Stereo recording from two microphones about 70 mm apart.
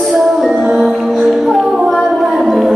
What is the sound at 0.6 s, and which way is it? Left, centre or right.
Music, centre.